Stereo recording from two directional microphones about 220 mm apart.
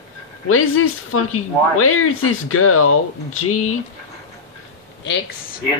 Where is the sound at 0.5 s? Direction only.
70° left (ahead or behind).